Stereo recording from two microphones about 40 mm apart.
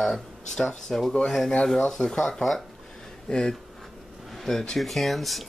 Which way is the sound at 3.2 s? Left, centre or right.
Centre.